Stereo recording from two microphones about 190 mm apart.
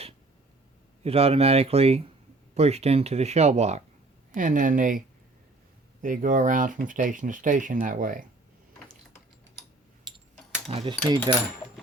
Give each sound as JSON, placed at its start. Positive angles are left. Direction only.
{"t": 1.0, "sound": "speech", "side_deg": -30}
{"t": 10.7, "sound": "speech", "side_deg": -30}